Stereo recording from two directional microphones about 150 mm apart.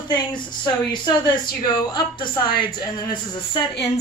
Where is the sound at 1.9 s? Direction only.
30° left (ahead or behind).